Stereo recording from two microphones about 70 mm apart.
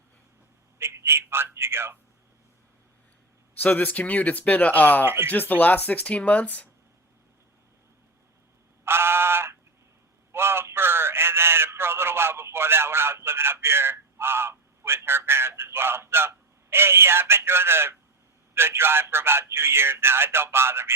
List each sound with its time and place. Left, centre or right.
0.8 s a man's voice: right
3.6 s speech: left
5.0 s a man's voice: right
5.3 s speech: left
8.8 s a sound: right
18.5 s a man's voice: right